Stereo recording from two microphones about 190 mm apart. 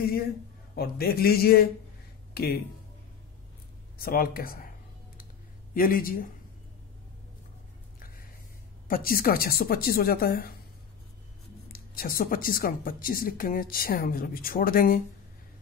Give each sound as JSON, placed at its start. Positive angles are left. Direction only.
{"t": 0.7, "sound": "speech", "side_deg": 55}
{"t": 4.0, "sound": "speech", "side_deg": 50}
{"t": 5.8, "sound": "speech", "side_deg": 50}
{"t": 8.8, "sound": "speech", "side_deg": 50}
{"t": 11.7, "sound": "speech", "side_deg": 50}